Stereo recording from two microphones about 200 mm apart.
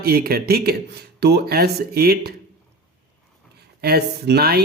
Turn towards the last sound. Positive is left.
turn(degrees=-50)  # may be behind; listen again after turning